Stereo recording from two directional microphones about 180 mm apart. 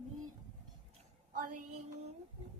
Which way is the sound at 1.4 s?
50° right (ahead or behind).